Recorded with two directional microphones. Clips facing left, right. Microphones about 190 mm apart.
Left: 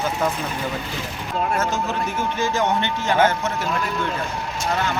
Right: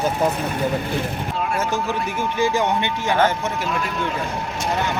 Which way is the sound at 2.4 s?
15° right (ahead or behind).